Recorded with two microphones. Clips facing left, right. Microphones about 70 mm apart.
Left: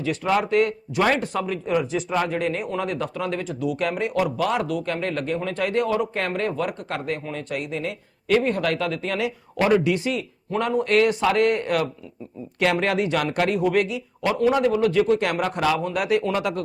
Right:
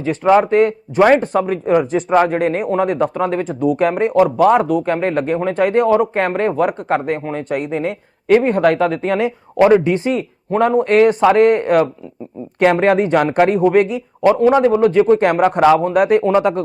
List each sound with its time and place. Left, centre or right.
0.0 s speech: right